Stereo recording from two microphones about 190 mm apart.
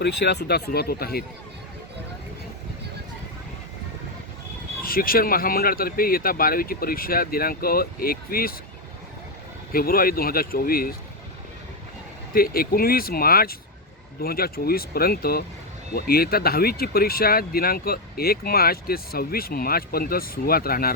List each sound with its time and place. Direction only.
0.0 s speech: 60° left (ahead or behind)
4.8 s speech: 50° left (ahead or behind)
9.7 s speech: 50° left (ahead or behind)
12.3 s speech: 50° left (ahead or behind)